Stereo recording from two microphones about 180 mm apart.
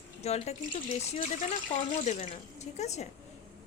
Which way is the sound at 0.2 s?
35° left (ahead or behind).